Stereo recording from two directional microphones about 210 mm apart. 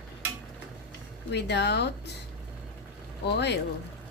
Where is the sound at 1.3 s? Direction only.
55° left (ahead or behind).